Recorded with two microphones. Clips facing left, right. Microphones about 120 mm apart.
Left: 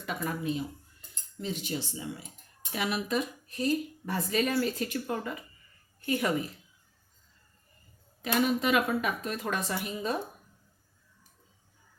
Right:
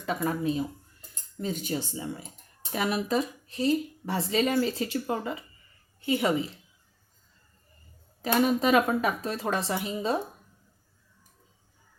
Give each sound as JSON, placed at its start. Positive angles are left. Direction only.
{"t": 0.0, "sound": "speech", "side_deg": -35}
{"t": 8.2, "sound": "speech", "side_deg": -35}